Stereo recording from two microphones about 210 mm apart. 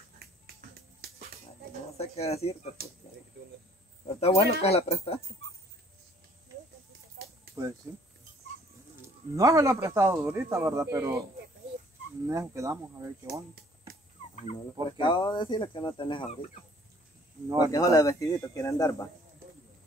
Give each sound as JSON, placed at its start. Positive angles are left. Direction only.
{"t": 0.2, "sound": "finger snapping", "side_deg": -45}
{"t": 2.0, "sound": "speech", "side_deg": 30}
{"t": 4.2, "sound": "speech", "side_deg": 30}
{"t": 7.2, "sound": "a sound", "side_deg": -45}
{"t": 9.3, "sound": "speech", "side_deg": -15}
{"t": 12.3, "sound": "speech", "side_deg": -15}
{"t": 14.3, "sound": "speech", "side_deg": 25}
{"t": 17.6, "sound": "speech", "side_deg": 15}